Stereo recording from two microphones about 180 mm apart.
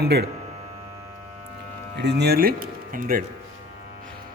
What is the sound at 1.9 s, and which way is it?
Speech, 70° right (ahead or behind).